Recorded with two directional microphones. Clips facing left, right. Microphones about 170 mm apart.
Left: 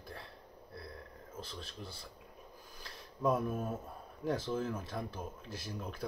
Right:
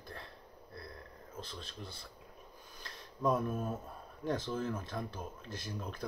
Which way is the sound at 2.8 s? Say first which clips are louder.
Even; 5° left (ahead or behind).